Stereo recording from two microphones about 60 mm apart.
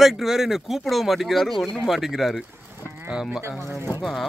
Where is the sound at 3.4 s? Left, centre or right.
Right.